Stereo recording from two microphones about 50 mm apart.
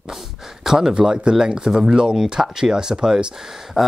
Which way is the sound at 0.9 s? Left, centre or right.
Centre.